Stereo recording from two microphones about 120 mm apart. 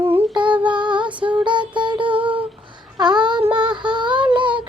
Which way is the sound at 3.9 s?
40° right (ahead or behind).